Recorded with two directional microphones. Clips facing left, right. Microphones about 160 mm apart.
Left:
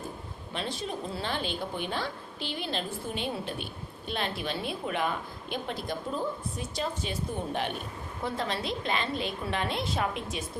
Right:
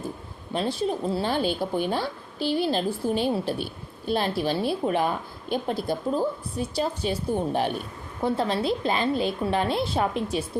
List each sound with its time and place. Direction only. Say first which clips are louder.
0.5 s a woman's voice: right 8 dB; 35° right (ahead or behind)